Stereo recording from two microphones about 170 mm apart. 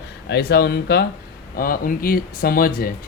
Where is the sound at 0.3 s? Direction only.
70° left (ahead or behind).